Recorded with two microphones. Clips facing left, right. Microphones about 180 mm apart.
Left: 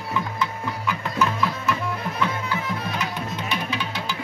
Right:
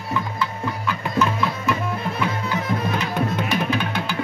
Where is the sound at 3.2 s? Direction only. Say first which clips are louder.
Right 6 dB; 50° right (ahead or behind).